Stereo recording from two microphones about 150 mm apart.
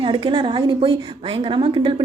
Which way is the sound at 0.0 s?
35° right (ahead or behind).